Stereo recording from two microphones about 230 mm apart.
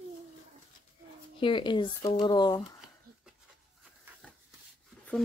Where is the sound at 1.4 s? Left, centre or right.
Left.